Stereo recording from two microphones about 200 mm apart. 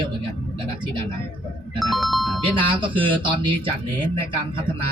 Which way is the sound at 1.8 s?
Centre (ahead or behind).